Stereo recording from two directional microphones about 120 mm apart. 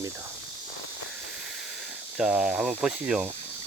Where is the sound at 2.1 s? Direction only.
5° right (ahead or behind).